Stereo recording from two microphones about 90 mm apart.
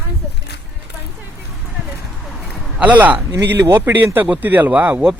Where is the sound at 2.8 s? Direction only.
15° right (ahead or behind).